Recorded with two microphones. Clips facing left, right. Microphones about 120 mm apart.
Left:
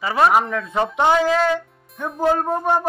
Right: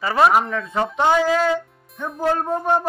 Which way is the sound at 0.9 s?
15° left (ahead or behind).